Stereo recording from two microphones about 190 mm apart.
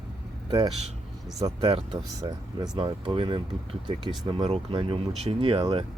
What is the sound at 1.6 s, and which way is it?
Speech, 25° right (ahead or behind).